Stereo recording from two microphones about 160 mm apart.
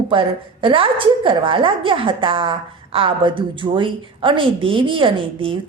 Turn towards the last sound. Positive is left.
turn(degrees=-35)  # may be behind; listen again after turning